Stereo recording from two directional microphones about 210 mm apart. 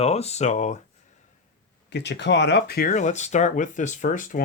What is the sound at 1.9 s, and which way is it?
Speech, 55° left (ahead or behind).